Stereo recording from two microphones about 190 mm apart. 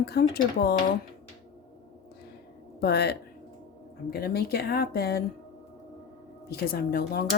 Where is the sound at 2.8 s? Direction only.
60° left (ahead or behind).